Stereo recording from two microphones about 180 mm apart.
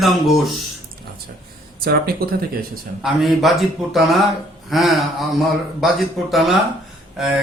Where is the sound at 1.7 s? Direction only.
55° right (ahead or behind).